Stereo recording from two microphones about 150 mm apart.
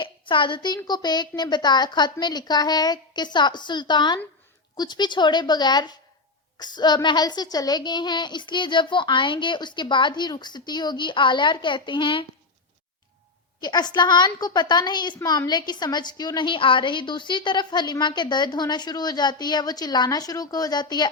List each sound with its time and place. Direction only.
0.0 s a sound: 35° left (ahead or behind)
0.8 s a woman's voice: 30° left (ahead or behind)
13.6 s a woman's voice: 30° left (ahead or behind)